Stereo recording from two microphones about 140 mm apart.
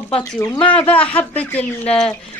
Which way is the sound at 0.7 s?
10° left (ahead or behind).